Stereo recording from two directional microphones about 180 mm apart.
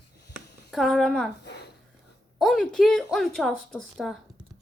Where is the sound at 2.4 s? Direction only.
5° left (ahead or behind).